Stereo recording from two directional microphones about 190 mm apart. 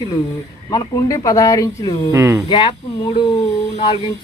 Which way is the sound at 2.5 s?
25° left (ahead or behind).